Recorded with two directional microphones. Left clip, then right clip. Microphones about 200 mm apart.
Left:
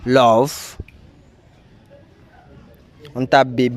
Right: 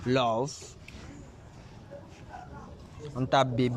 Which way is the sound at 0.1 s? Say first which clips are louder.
Left 14 dB; 50° left (ahead or behind).